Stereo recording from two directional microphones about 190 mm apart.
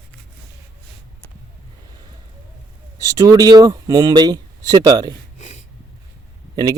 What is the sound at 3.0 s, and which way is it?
Speech, 15° right (ahead or behind).